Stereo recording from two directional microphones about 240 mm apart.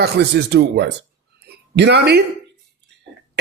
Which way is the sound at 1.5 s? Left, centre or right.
Right.